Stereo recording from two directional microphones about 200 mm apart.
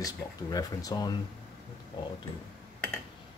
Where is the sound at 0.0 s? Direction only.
20° left (ahead or behind).